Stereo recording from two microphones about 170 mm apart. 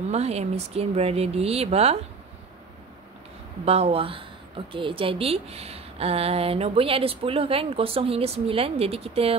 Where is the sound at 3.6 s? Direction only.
35° right (ahead or behind).